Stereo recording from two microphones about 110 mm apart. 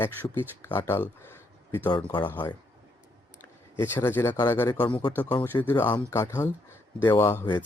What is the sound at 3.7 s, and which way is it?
Speech, 20° left (ahead or behind).